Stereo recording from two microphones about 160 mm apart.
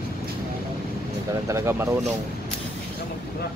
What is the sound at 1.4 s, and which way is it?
Speech, 15° right (ahead or behind).